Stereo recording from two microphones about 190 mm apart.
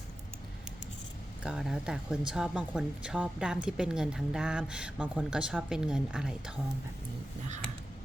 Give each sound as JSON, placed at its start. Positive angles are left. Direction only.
{"t": 1.5, "sound": "speech", "side_deg": -5}